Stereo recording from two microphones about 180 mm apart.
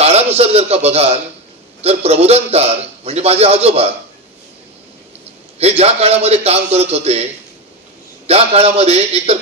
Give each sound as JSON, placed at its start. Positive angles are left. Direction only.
{"t": 0.0, "sound": "a sound", "side_deg": -35}
{"t": 1.8, "sound": "a man's voice", "side_deg": -35}
{"t": 5.6, "sound": "a man's voice", "side_deg": -35}
{"t": 8.3, "sound": "a man's voice", "side_deg": -35}